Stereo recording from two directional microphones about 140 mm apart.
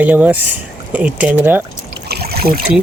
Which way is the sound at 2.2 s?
90° right.